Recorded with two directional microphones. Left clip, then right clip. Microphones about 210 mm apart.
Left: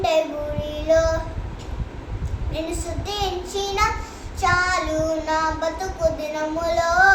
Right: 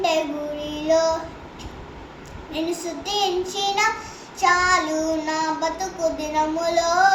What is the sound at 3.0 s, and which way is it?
Child singing, 15° left (ahead or behind).